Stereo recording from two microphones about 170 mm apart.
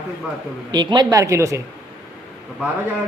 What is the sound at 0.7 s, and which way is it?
Speech, 25° right (ahead or behind).